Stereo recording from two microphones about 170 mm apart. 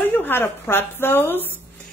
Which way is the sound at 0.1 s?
10° left (ahead or behind).